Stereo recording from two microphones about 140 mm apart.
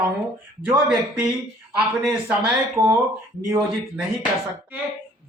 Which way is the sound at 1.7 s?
5° right (ahead or behind).